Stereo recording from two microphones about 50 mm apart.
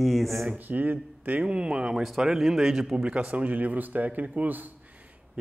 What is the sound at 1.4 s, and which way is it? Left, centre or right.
A man's voice, centre.